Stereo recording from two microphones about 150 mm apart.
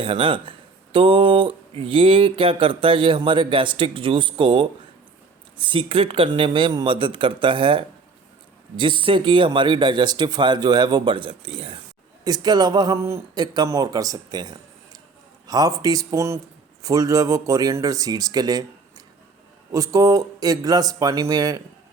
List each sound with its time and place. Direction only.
0.0 s speech: 35° right (ahead or behind)
12.2 s speech: 25° right (ahead or behind)